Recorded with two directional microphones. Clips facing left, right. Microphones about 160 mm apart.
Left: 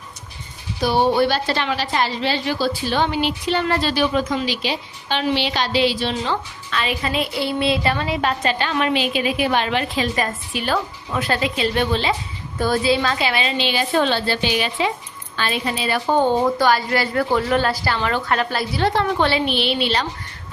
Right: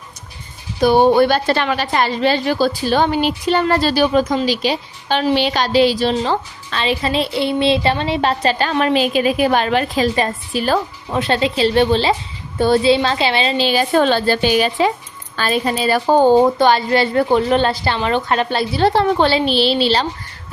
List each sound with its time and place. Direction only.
0.8 s a woman's voice: 50° right (ahead or behind)
10.2 s a woman's voice: 35° right (ahead or behind)
11.2 s a woman's voice: 25° right (ahead or behind)
16.6 s a woman's voice: 25° right (ahead or behind)